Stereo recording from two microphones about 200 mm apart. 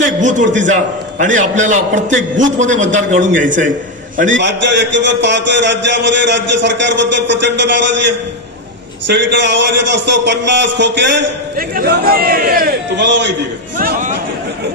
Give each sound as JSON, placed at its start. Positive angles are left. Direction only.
{"t": 0.0, "sound": "a man's voice", "side_deg": -40}
{"t": 4.3, "sound": "a man's voice", "side_deg": -60}
{"t": 13.7, "sound": "speech", "side_deg": -45}